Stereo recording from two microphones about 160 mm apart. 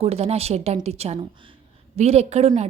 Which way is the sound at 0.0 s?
40° right (ahead or behind).